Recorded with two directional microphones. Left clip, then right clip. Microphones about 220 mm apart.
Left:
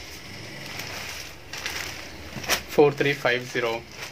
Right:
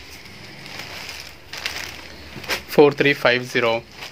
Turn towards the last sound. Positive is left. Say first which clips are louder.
# right 6 dB
turn(degrees=-50)  # may be behind; listen again after turning